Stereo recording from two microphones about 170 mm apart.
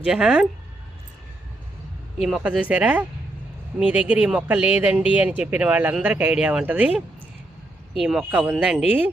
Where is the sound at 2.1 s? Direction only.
Centre (ahead or behind).